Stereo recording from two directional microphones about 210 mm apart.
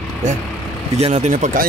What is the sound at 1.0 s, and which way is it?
Speech, 30° right (ahead or behind).